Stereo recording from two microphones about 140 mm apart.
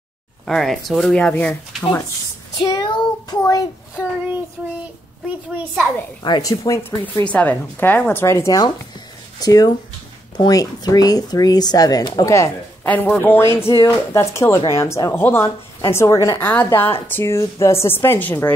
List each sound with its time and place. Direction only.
0.5 s speech: centre (ahead or behind)
2.6 s child singing: 30° left (ahead or behind)
3.4 s a child's voice: 25° left (ahead or behind)
6.2 s speech: 30° left (ahead or behind)
7.2 s a woman's voice: 10° left (ahead or behind); by 12.4 s 25° left (ahead or behind)
12.8 s a woman's voice: 10° left (ahead or behind)